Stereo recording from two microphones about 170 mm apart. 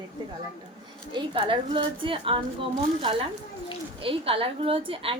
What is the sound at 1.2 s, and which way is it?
A woman's voice, 30° right (ahead or behind).